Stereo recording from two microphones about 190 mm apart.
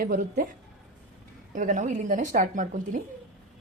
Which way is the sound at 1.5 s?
40° right (ahead or behind).